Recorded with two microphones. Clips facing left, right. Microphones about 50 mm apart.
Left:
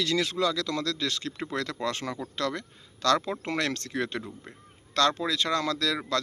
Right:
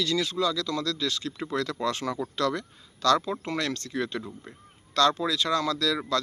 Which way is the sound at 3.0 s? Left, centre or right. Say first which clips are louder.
Right 2 dB; left.